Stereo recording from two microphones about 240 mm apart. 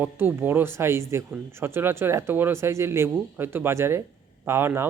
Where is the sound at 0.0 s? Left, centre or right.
Centre.